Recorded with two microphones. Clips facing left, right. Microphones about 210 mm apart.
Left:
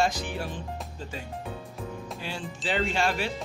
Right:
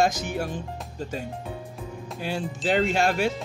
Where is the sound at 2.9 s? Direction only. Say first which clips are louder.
Right 5 dB; 45° right (ahead or behind).